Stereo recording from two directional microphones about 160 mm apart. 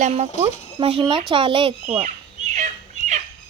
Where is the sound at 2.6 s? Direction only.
50° right (ahead or behind).